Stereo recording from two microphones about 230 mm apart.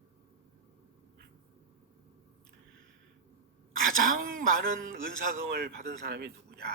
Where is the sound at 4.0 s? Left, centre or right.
Right.